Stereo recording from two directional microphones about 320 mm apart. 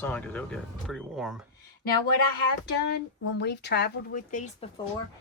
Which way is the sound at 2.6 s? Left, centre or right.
Left.